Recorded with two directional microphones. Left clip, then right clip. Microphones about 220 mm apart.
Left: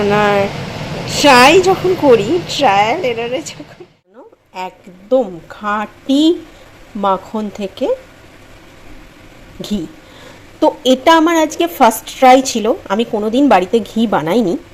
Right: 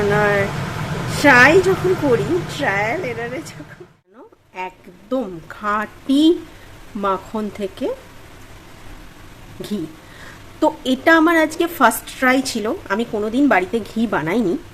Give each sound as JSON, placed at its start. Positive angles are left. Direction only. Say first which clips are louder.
{"t": 0.1, "sound": "a woman's voice", "louder": "left 4 dB", "side_deg": 20}
{"t": 4.5, "sound": "a woman's voice", "louder": "left 4 dB", "side_deg": 5}
{"t": 9.6, "sound": "a woman's voice", "louder": "left 4 dB", "side_deg": 10}